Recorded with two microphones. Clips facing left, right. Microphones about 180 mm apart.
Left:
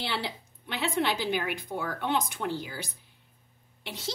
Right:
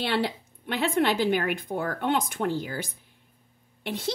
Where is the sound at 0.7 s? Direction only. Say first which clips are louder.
Right 5 dB; 55° right (ahead or behind).